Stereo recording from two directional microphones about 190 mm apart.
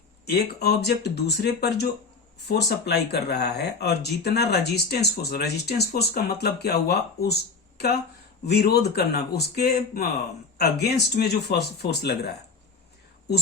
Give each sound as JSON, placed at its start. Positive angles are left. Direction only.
{"t": 0.3, "sound": "speech", "side_deg": 55}
{"t": 8.4, "sound": "speech", "side_deg": 60}